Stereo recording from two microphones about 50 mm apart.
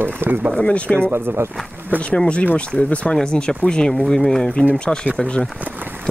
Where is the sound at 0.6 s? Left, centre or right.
Left.